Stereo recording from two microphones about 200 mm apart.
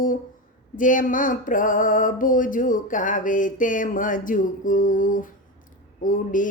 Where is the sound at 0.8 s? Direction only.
40° left (ahead or behind).